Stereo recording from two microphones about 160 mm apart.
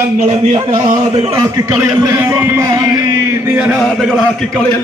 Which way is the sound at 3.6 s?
Centre (ahead or behind).